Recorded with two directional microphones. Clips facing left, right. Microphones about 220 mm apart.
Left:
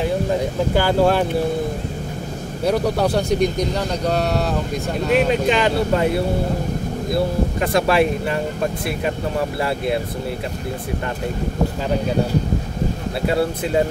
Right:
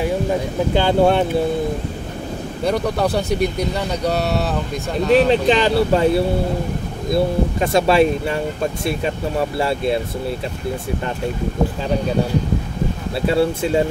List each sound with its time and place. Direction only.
0.7 s speech: 20° right (ahead or behind)
2.6 s speech: centre (ahead or behind)
5.1 s speech: 30° right (ahead or behind)
7.6 s speech: 25° right (ahead or behind)
9.6 s speech: 25° right (ahead or behind)